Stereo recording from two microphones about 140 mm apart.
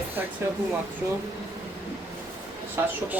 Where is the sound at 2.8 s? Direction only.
20° right (ahead or behind).